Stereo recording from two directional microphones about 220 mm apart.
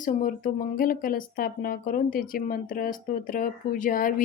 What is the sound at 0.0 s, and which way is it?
Speech, 35° left (ahead or behind).